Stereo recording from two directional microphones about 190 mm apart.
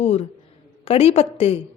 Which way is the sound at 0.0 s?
35° left (ahead or behind).